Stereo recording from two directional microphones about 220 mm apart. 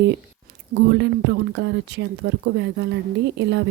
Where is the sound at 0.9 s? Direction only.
55° right (ahead or behind).